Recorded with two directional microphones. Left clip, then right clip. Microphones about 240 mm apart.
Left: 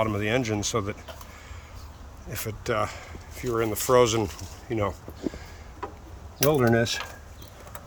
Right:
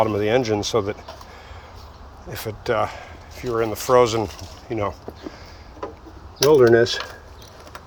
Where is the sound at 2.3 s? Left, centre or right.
Centre.